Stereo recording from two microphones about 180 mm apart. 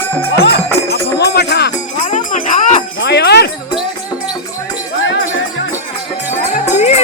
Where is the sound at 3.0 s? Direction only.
70° left (ahead or behind).